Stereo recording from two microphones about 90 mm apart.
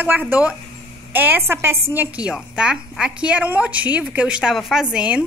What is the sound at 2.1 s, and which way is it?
A woman's voice, 15° right (ahead or behind).